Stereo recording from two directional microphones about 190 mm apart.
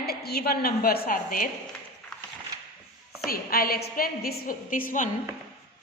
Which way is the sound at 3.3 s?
50° left (ahead or behind).